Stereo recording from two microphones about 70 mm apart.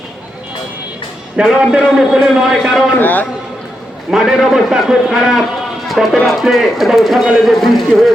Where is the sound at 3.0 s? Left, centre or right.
Left.